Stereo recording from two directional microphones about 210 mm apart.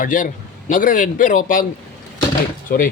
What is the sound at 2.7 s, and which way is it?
Speech, 45° left (ahead or behind).